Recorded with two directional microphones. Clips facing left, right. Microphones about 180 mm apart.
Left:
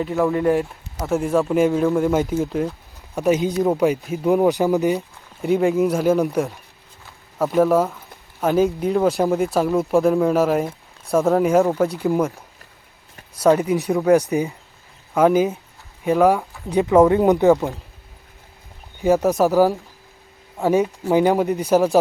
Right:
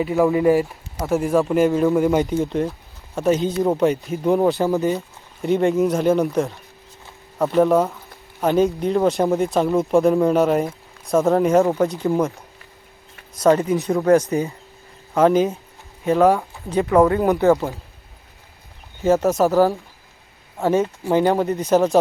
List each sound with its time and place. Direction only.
0.0 s speech: 5° right (ahead or behind)
4.4 s speech: 15° left (ahead or behind)
5.4 s speech: centre (ahead or behind)
13.4 s speech: 10° left (ahead or behind)
16.6 s speech: 15° left (ahead or behind)
19.0 s speech: 15° left (ahead or behind)